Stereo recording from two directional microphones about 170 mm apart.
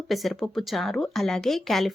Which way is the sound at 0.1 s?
Centre (ahead or behind).